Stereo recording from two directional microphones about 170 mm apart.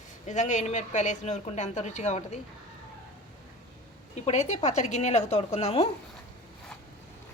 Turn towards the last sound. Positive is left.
turn(degrees=40)  # may be behind; listen again after turning